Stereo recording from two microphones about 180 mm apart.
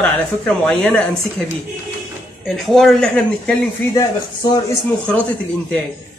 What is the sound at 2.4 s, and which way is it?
Speech, centre (ahead or behind).